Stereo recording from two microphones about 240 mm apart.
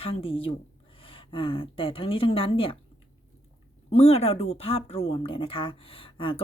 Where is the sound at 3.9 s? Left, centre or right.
Left.